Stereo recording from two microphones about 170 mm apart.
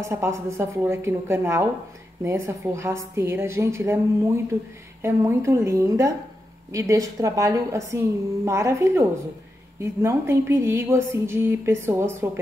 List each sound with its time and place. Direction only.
0.0 s speech: 15° right (ahead or behind)